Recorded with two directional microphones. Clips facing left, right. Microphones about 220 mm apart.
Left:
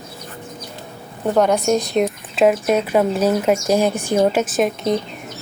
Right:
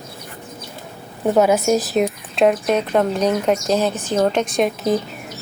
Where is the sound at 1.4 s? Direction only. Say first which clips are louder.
Right 1 dB; 5° right (ahead or behind).